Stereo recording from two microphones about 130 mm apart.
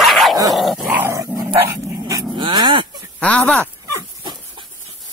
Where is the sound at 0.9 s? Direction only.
15° right (ahead or behind).